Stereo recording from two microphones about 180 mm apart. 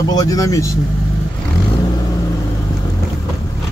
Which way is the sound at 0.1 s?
20° left (ahead or behind).